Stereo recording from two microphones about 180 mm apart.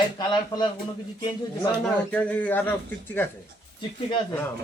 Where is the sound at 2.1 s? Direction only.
5° left (ahead or behind).